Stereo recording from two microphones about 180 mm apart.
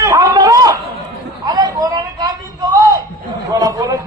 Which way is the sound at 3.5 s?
20° right (ahead or behind).